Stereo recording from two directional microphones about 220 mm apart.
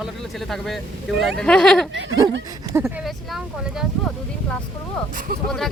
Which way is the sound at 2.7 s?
10° right (ahead or behind).